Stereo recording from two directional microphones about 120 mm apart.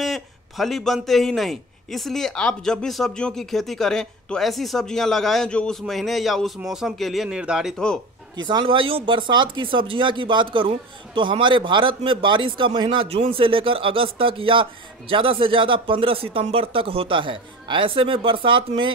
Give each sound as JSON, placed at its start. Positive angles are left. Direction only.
{"t": 0.0, "sound": "speech", "side_deg": 0}
{"t": 7.7, "sound": "speech", "side_deg": 5}
{"t": 8.4, "sound": "a man's voice", "side_deg": -40}